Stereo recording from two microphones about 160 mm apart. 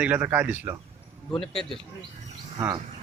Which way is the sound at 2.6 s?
15° right (ahead or behind).